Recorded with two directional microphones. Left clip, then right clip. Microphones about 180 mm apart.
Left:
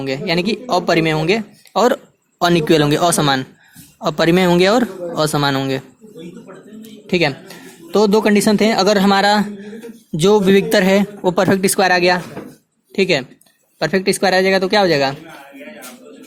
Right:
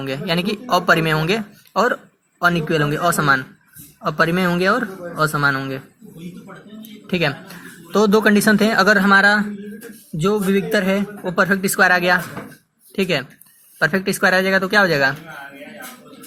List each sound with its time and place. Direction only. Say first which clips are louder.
0.0 s speech: left 3 dB; 25° left (ahead or behind)
1.7 s a man's voice: left 3 dB; 40° left (ahead or behind)
7.1 s a man's voice: left 4 dB; 25° left (ahead or behind)